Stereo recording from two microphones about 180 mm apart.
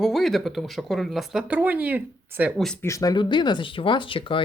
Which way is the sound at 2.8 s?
20° left (ahead or behind).